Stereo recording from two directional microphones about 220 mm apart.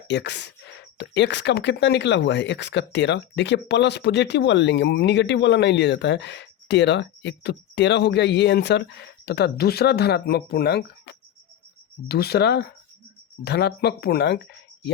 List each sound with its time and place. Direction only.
0.1 s speech: 50° left (ahead or behind)